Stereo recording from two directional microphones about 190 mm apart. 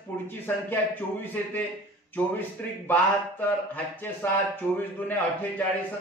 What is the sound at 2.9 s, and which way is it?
Speech, 10° left (ahead or behind).